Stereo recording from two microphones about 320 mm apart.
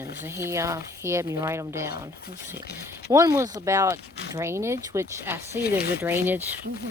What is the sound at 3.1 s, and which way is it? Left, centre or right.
Speech, centre.